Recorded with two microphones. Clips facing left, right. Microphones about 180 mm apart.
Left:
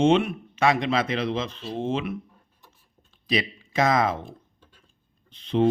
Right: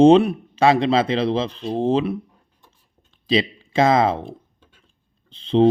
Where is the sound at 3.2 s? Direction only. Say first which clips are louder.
Right 6 dB; 30° right (ahead or behind).